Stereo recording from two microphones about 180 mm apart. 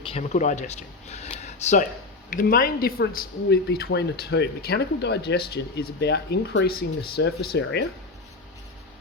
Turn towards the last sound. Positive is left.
turn(degrees=65)  # may be behind; listen again after turning